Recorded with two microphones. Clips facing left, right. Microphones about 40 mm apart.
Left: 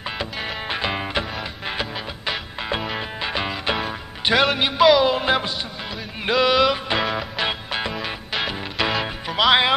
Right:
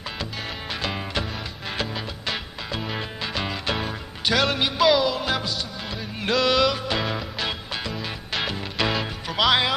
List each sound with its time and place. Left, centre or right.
0.2 s music: left
6.2 s music: centre
7.9 s music: centre